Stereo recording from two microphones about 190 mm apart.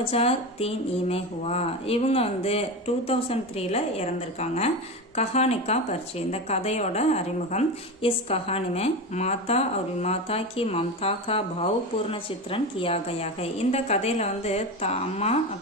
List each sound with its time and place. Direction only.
0.0 s speech: 30° left (ahead or behind)